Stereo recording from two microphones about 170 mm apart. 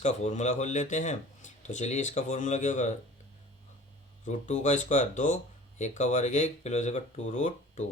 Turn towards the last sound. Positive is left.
turn(degrees=45)  # may be behind; listen again after turning